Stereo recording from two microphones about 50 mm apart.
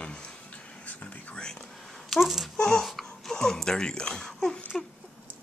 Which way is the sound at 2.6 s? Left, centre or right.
Centre.